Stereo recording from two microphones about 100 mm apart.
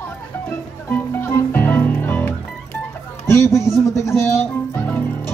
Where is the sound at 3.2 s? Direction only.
30° left (ahead or behind).